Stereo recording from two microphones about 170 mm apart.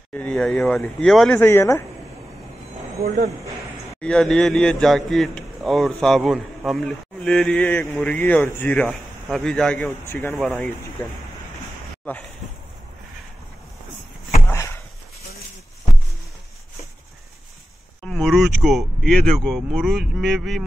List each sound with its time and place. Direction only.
0.1 s a man's voice: 5° left (ahead or behind)
1.4 s speech: 15° left (ahead or behind)
4.0 s a man's voice: 5° left (ahead or behind)
10.4 s a man's voice: centre (ahead or behind)
12.1 s speech: 10° left (ahead or behind)
18.0 s a man's voice: 5° left (ahead or behind)